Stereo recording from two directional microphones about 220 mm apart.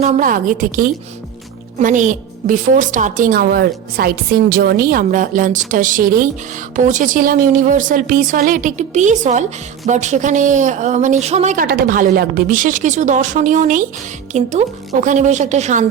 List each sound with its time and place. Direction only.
0.0 s a woman's voice: 35° right (ahead or behind)